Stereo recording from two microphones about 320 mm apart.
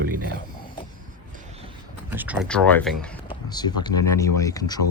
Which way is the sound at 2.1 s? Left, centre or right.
Centre.